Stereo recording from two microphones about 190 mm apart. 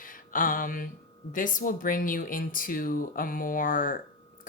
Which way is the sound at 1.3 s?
45° left (ahead or behind).